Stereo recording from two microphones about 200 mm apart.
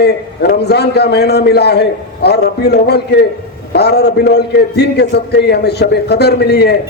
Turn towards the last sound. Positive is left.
turn(degrees=55)  # may be behind; listen again after turning